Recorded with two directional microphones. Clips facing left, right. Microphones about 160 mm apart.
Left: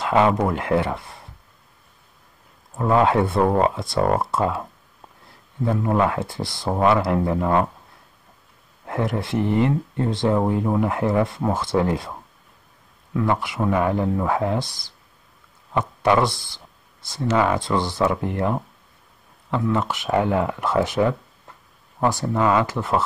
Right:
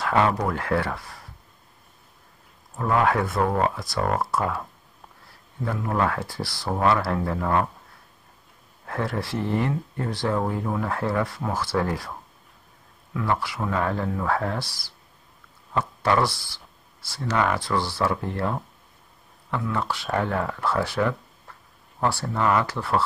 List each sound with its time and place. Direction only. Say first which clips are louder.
0.0 s speech: left 4 dB; 20° left (ahead or behind)
2.8 s speech: left 4 dB; 25° left (ahead or behind)
5.7 s speech: left 4 dB; 20° left (ahead or behind)
8.8 s speech: left 4 dB; 20° left (ahead or behind)
13.2 s speech: left 4 dB; 20° left (ahead or behind)